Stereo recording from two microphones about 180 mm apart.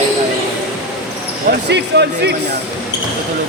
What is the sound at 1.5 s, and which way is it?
Speech, 70° right (ahead or behind).